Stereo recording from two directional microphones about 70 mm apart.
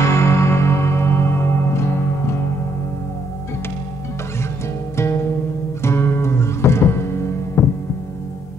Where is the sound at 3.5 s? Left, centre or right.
Left.